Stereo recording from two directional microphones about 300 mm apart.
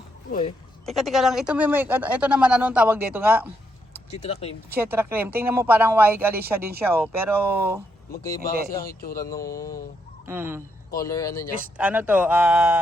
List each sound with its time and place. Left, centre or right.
0.3 s speech: left
0.9 s speech: centre
4.1 s speech: left
4.7 s speech: centre
8.8 s speech: left
9.2 s speech: centre
10.2 s speech: centre
10.9 s speech: centre
11.8 s speech: centre